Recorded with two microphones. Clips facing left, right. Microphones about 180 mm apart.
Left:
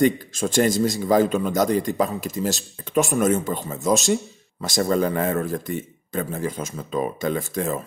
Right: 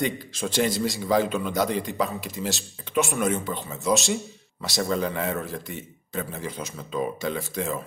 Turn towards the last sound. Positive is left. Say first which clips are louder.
# left 4 dB
turn(degrees=45)  # may be behind; listen again after turning